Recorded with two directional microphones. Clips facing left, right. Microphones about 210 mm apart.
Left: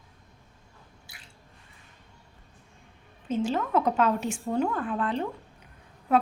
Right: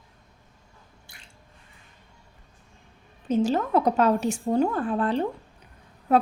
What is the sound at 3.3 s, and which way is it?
A woman's voice, 40° right (ahead or behind).